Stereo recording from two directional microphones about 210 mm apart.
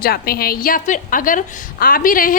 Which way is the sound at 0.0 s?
45° left (ahead or behind).